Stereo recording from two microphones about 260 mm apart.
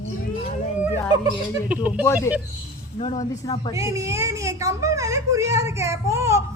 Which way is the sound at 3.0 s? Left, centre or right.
Centre.